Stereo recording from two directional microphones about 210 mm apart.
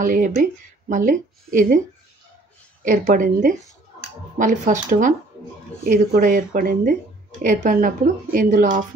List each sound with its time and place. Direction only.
0.0 s speech: 40° right (ahead or behind)
2.8 s speech: 40° right (ahead or behind)